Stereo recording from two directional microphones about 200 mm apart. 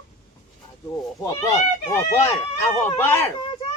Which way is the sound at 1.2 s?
15° left (ahead or behind).